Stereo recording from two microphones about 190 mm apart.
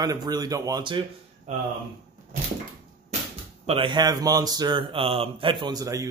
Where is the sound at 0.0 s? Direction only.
20° right (ahead or behind).